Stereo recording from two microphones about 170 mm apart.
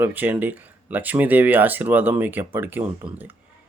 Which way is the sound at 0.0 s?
10° right (ahead or behind).